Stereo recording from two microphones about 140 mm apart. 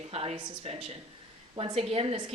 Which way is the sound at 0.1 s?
45° right (ahead or behind).